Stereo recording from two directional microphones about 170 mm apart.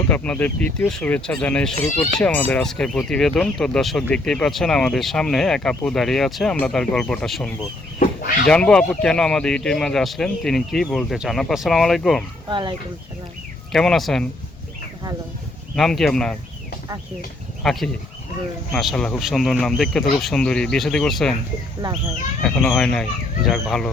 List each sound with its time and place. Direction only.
0.1 s speech: 10° left (ahead or behind)
12.5 s speech: 30° right (ahead or behind)
13.7 s speech: centre (ahead or behind)
15.7 s speech: centre (ahead or behind)
17.6 s speech: centre (ahead or behind)
22.4 s speech: 5° left (ahead or behind)